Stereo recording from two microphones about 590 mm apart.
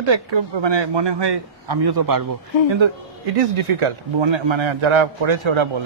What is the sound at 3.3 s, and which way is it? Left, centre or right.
Speech, right.